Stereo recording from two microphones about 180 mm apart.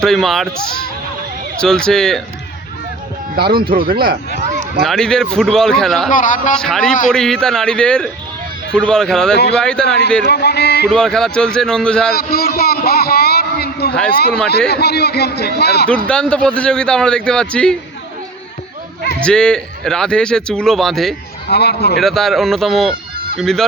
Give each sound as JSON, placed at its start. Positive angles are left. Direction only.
{"t": 0.0, "sound": "a man's voice", "side_deg": 0}
{"t": 3.3, "sound": "speech", "side_deg": -55}
{"t": 4.8, "sound": "a man's voice", "side_deg": 0}
{"t": 6.1, "sound": "speech", "side_deg": 45}
{"t": 6.6, "sound": "a man's voice", "side_deg": 5}
{"t": 9.3, "sound": "a man's voice", "side_deg": 65}
{"t": 9.6, "sound": "a man's voice", "side_deg": 5}
{"t": 9.8, "sound": "a man's voice", "side_deg": 65}
{"t": 10.9, "sound": "a man's voice", "side_deg": 5}
{"t": 12.1, "sound": "a man's voice", "side_deg": 60}
{"t": 16.0, "sound": "a man's voice", "side_deg": 5}
{"t": 19.2, "sound": "a man's voice", "side_deg": 5}
{"t": 21.4, "sound": "a man's voice", "side_deg": 65}
{"t": 22.0, "sound": "a man's voice", "side_deg": 0}